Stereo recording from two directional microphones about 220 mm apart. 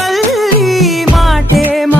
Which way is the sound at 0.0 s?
Centre (ahead or behind).